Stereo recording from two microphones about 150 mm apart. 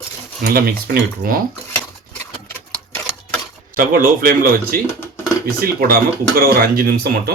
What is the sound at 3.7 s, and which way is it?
Speech, 70° right (ahead or behind).